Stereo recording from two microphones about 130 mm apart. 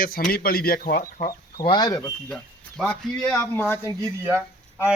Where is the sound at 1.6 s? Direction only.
35° left (ahead or behind).